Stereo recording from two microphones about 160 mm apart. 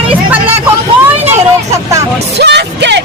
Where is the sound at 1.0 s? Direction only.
15° right (ahead or behind).